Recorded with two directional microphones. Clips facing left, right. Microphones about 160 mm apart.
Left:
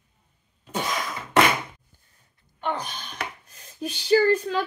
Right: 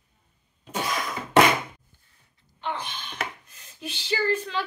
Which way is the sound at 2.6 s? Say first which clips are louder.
Left 3 dB; 45° left (ahead or behind).